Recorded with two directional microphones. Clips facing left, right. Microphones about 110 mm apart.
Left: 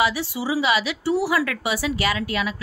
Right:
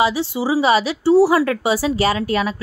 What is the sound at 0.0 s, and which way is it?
Speech, 25° right (ahead or behind).